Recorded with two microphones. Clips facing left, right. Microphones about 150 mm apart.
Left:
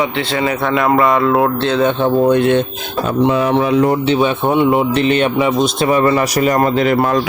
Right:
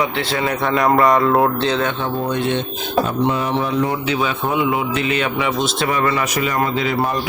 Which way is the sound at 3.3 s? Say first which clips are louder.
Left 6 dB; 85° left.